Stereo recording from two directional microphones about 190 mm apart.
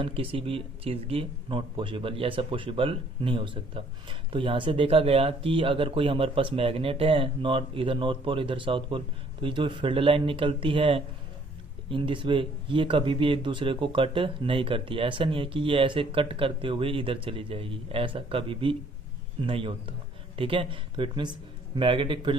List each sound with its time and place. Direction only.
0.0 s speech: 30° right (ahead or behind)